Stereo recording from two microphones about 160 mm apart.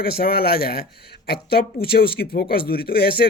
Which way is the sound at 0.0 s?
70° left (ahead or behind).